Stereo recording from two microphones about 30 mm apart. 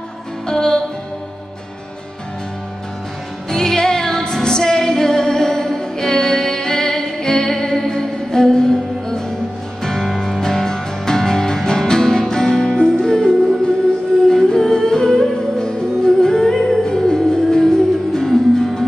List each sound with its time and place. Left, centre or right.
0.5 s music: left
3.4 s music: centre
10.4 s music: centre